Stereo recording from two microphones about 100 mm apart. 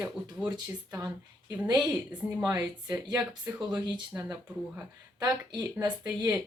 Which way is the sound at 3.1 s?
40° right (ahead or behind).